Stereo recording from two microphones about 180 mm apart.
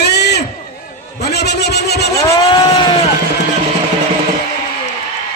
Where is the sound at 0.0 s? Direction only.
65° left (ahead or behind).